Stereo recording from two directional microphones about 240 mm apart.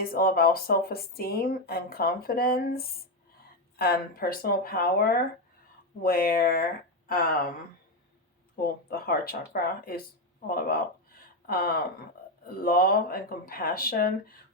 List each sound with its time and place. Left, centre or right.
0.0 s speech: left
8.6 s speech: left